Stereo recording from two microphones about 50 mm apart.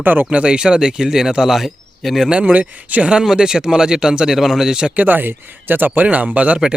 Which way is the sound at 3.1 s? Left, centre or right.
Centre.